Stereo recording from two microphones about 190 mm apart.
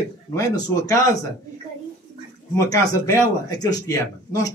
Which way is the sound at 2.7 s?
15° left (ahead or behind).